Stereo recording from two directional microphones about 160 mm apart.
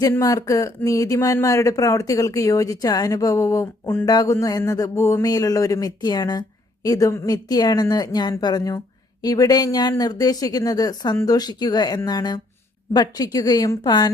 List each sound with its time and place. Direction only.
0.0 s speech: 20° left (ahead or behind)